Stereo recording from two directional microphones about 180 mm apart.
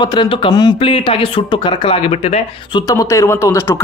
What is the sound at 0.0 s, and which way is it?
Speech, 25° left (ahead or behind).